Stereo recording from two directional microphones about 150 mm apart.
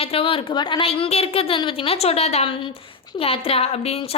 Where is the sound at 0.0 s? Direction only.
40° left (ahead or behind).